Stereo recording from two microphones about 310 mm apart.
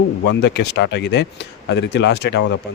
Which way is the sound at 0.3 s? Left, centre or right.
Left.